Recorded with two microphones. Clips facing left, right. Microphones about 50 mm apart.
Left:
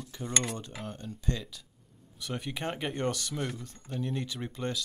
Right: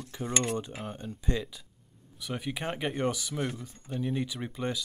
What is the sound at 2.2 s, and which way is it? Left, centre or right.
Speech, centre.